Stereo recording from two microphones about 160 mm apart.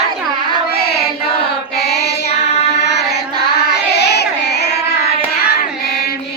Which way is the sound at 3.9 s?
90° left.